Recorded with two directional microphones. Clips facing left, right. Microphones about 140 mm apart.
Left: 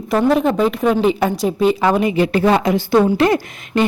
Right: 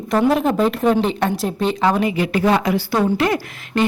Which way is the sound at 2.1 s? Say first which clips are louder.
Left 3 dB; 30° left (ahead or behind).